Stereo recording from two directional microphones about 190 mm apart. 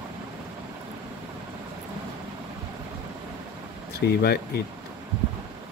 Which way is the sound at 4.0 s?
55° left (ahead or behind).